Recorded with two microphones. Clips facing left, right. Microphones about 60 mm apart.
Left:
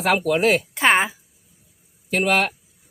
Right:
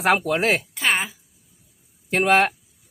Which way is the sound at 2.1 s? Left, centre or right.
Right.